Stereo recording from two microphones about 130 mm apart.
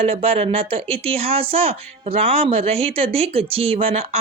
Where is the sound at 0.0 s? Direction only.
50° right (ahead or behind).